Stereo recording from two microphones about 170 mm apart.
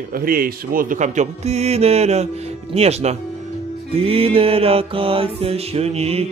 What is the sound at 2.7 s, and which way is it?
Music, 40° right (ahead or behind).